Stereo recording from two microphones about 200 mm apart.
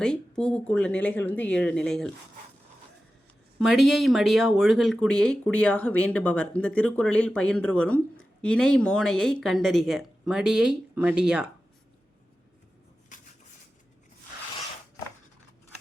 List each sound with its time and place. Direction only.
0.0 s speech: 5° left (ahead or behind)
3.6 s speech: centre (ahead or behind)
13.1 s a sound: 40° left (ahead or behind)